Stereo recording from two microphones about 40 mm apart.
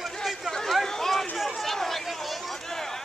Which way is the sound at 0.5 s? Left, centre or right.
Centre.